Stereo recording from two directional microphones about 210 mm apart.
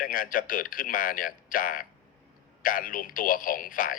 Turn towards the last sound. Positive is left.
turn(degrees=40)  # may be behind; listen again after turning